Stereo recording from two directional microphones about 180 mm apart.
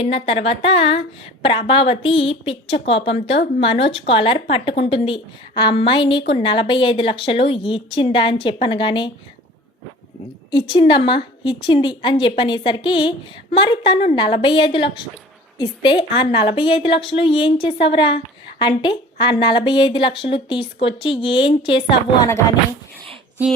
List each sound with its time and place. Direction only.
0.0 s a woman's voice: 35° left (ahead or behind)
10.5 s a woman's voice: 25° left (ahead or behind)